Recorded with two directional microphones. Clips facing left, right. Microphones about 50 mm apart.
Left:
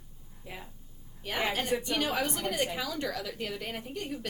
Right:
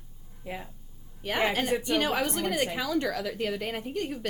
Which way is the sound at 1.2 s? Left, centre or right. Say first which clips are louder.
Right 4 dB; right.